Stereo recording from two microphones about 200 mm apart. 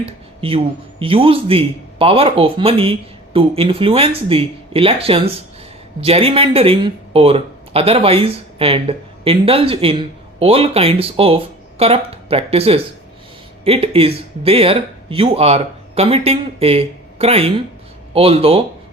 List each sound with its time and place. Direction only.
0.0 s speech: 25° right (ahead or behind)